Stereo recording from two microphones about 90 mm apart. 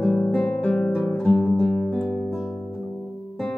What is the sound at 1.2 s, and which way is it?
Music, 5° left (ahead or behind).